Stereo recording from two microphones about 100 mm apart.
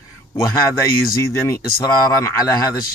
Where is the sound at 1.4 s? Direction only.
30° left (ahead or behind).